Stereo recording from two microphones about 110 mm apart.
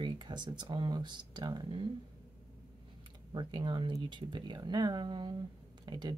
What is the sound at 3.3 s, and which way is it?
Speech, 45° right (ahead or behind).